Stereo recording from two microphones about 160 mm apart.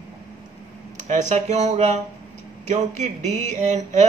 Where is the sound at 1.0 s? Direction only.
50° right (ahead or behind).